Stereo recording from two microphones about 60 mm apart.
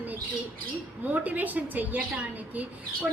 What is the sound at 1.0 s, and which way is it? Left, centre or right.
Speech, right.